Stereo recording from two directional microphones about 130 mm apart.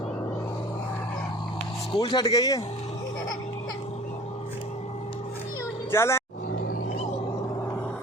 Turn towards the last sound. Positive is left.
turn(degrees=20)  # may be behind; listen again after turning